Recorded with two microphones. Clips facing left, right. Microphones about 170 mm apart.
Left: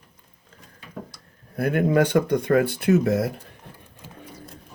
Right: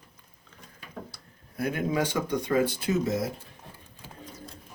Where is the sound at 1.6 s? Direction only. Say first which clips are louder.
Left 7 dB; 60° left (ahead or behind).